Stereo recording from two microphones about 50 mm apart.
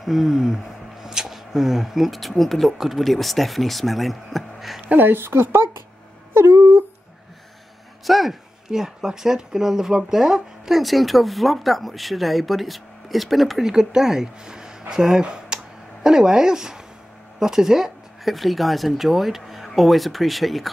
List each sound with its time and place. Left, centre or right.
0.0 s speech: centre
4.8 s speech: right
6.3 s a sound: right
8.0 s speech: centre
13.7 s speech: centre
17.4 s a sound: centre
18.3 s speech: centre